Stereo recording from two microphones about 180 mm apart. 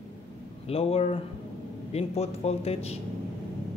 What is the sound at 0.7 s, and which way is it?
Speech, 35° left (ahead or behind).